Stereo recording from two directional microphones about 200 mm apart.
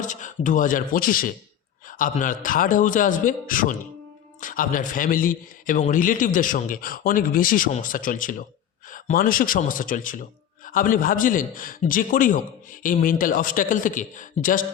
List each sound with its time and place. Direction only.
0.0 s a man's voice: 40° left (ahead or behind)